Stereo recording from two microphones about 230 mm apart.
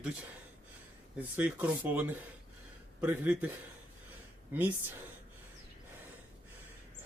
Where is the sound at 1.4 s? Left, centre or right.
Centre.